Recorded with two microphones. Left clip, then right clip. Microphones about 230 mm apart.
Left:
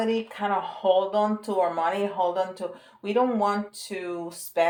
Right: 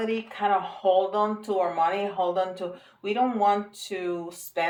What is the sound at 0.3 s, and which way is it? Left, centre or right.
Speech, left.